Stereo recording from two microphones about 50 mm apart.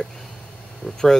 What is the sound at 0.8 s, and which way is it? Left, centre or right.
Speech, left.